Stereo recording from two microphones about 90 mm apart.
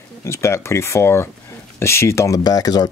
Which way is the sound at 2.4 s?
45° left (ahead or behind).